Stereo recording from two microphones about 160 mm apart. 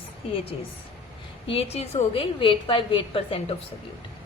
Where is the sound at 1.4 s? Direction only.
40° left (ahead or behind).